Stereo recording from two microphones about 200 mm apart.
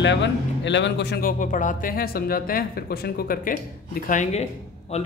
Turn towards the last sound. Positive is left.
turn(degrees=35)  # may be behind; listen again after turning